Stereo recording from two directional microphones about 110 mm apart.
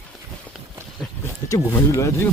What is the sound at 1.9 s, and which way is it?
Speech, 30° left (ahead or behind).